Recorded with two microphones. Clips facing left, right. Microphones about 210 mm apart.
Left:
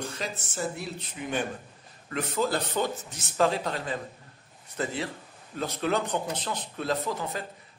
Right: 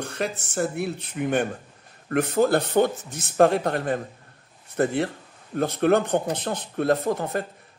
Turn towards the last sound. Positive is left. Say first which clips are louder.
# right 7 dB
turn(degrees=-55)  # may be behind; listen again after turning